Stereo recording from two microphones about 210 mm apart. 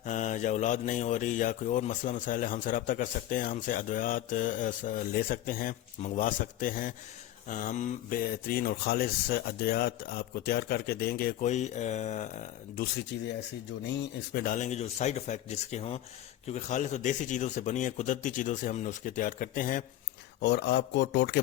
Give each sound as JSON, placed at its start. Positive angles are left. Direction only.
{"t": 0.0, "sound": "speech", "side_deg": 35}
{"t": 12.8, "sound": "speech", "side_deg": 50}
{"t": 20.4, "sound": "speech", "side_deg": 55}